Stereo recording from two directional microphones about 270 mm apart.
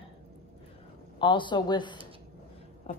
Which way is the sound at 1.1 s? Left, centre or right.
Centre.